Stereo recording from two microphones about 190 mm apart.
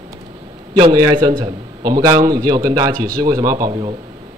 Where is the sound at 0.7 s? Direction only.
20° right (ahead or behind).